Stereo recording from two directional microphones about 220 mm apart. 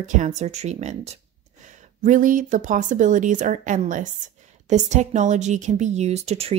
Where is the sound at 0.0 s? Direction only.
35° right (ahead or behind).